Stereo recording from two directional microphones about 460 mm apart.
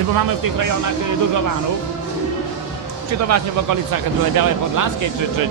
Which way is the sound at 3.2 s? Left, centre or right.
Right.